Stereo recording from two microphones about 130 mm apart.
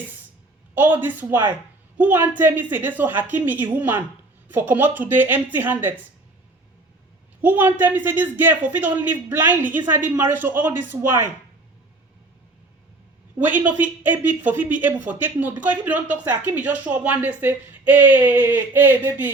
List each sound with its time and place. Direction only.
0.7 s speech: 15° right (ahead or behind)
7.4 s speech: 15° right (ahead or behind)
13.4 s speech: 15° right (ahead or behind)